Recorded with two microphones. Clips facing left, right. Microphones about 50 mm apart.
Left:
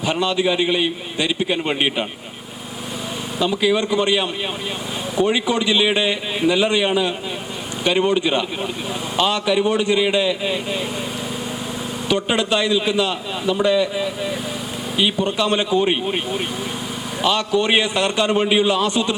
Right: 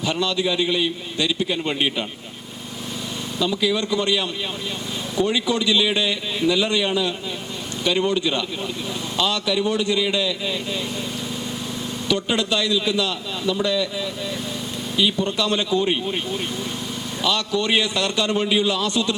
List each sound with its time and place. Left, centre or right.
0.0 s a man's voice: left
3.3 s a man's voice: left
3.8 s a man's voice: left
12.0 s a man's voice: left